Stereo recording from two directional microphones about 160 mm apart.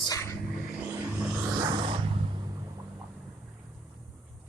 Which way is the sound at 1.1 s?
10° right (ahead or behind).